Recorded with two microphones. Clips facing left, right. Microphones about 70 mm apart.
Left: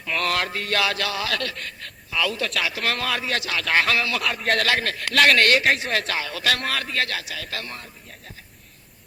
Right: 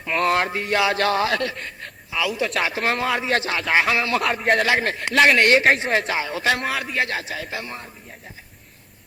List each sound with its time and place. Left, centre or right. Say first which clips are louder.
0.2 s a man's voice: right 5 dB; right
0.9 s a man's voice: right 6 dB; right; by 2.5 s centre
2.5 s a man's voice: right 3 dB; right
3.7 s a man's voice: right 2 dB; centre